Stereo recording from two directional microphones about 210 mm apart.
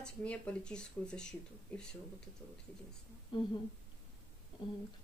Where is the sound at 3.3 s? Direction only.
25° left (ahead or behind).